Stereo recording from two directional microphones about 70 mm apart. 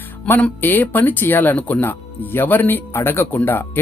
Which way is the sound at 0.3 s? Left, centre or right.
Left.